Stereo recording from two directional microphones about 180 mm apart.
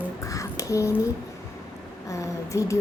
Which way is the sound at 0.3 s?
20° left (ahead or behind).